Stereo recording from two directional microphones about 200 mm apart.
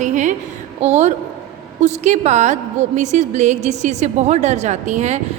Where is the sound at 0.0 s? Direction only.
40° right (ahead or behind).